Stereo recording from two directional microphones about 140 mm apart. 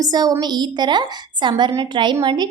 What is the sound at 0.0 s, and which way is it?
A woman's voice, 30° right (ahead or behind).